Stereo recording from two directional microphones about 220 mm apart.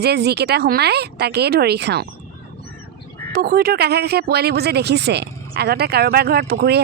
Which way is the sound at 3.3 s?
45° right (ahead or behind).